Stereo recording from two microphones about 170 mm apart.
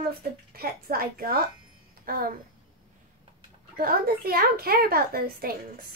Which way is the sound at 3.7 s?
60° right (ahead or behind).